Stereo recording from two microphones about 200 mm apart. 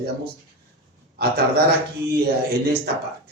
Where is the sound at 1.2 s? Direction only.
50° right (ahead or behind).